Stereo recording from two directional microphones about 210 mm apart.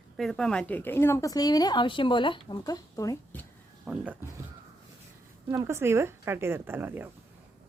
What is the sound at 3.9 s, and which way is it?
Speech, 5° right (ahead or behind).